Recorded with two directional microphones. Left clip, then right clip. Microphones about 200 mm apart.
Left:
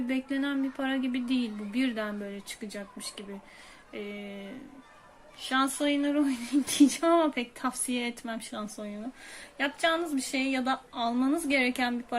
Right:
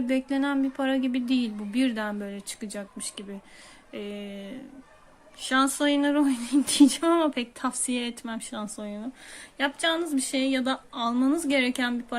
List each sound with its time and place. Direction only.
0.1 s speech: 25° right (ahead or behind)